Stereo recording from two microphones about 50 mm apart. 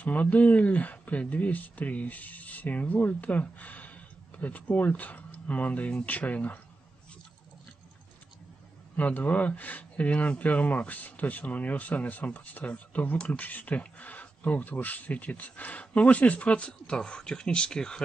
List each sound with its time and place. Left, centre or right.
0.0 s speech: left
8.9 s speech: left; by 18.0 s centre